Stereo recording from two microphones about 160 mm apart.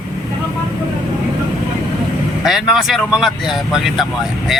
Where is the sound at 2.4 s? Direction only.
Centre (ahead or behind).